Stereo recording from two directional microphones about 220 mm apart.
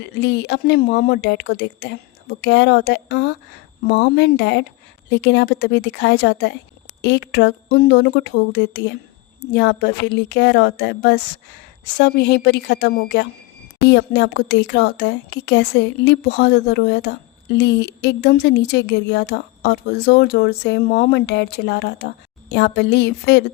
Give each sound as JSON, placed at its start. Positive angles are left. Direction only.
{"t": 0.0, "sound": "a woman's voice", "side_deg": 55}